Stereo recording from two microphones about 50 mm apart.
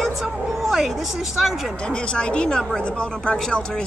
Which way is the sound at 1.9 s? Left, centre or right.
Centre.